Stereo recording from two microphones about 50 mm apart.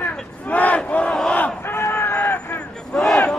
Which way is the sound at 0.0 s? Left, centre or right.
Left.